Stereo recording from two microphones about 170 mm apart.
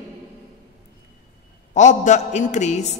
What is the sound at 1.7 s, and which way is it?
A woman's voice, 45° left (ahead or behind).